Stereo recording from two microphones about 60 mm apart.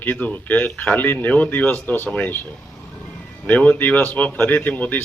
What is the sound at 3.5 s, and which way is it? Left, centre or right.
A man's voice, left.